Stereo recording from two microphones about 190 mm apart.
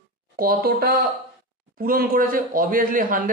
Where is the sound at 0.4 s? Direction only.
50° right (ahead or behind).